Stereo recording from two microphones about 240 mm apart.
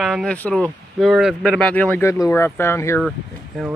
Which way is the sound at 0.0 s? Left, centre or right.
Centre.